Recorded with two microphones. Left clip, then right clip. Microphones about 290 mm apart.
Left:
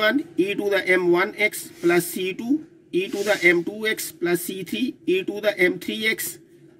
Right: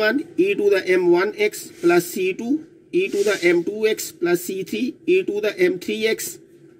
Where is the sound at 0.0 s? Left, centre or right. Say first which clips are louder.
Right 2 dB; centre.